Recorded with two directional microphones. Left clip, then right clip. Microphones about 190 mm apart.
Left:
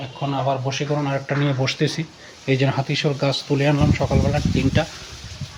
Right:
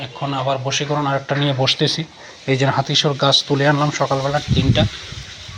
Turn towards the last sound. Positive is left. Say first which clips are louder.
# right 2 dB
turn(degrees=15)  # may be behind; listen again after turning